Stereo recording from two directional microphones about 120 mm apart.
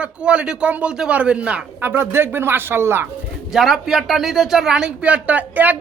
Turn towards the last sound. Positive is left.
turn(degrees=-15)  # may be behind; listen again after turning